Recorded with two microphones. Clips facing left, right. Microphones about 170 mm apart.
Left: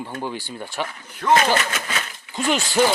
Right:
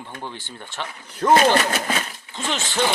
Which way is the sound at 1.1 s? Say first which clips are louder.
Right 2 dB; 35° right (ahead or behind).